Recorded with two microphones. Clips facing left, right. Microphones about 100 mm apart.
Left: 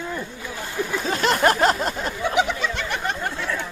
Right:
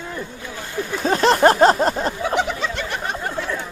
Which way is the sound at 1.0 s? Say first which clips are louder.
Right 6 dB; 35° right (ahead or behind).